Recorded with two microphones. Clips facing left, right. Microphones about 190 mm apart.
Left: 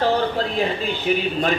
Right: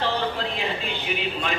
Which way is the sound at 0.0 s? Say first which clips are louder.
Left 6 dB; 40° left (ahead or behind).